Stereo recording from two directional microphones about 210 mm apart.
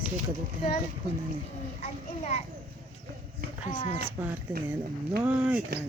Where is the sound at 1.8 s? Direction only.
35° left (ahead or behind).